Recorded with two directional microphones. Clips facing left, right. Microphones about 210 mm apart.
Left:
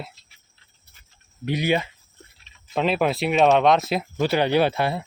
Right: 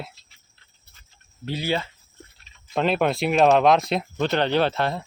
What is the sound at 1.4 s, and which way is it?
Speech, 15° left (ahead or behind).